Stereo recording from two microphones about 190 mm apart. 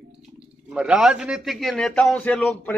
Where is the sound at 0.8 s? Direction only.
5° right (ahead or behind).